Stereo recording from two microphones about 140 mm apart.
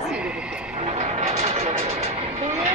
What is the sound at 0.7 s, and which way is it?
Vehicle, 50° right (ahead or behind).